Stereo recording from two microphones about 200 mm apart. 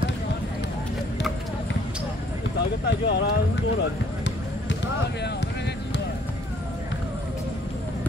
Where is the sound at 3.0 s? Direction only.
55° left (ahead or behind).